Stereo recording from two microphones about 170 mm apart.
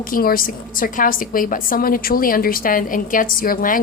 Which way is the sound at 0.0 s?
55° left (ahead or behind).